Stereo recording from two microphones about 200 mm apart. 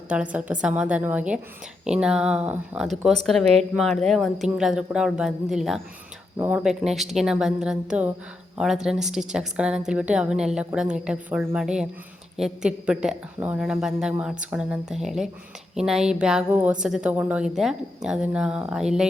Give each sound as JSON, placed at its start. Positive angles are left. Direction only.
{"t": 0.1, "sound": "a woman's voice", "side_deg": -5}